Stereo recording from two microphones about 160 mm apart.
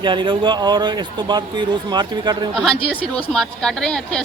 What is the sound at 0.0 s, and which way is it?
Speech, 30° right (ahead or behind).